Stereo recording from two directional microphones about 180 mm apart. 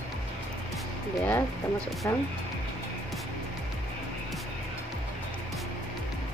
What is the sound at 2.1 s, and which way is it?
Speech, 15° left (ahead or behind).